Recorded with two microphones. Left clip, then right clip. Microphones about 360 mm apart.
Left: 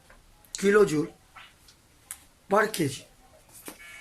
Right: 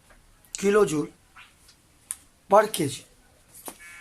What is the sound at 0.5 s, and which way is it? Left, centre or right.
Speech, centre.